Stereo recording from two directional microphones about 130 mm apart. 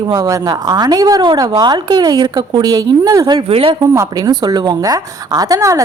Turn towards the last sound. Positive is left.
turn(degrees=-25)  # may be behind; listen again after turning